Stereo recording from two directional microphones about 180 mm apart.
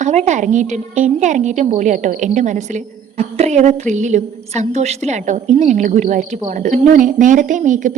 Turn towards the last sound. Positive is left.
turn(degrees=-45)  # may be behind; listen again after turning